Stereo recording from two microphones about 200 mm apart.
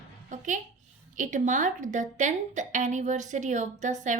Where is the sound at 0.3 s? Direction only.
40° right (ahead or behind).